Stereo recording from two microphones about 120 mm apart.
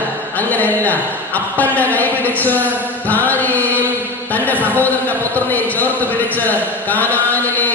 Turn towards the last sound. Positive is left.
turn(degrees=15)  # may be behind; listen again after turning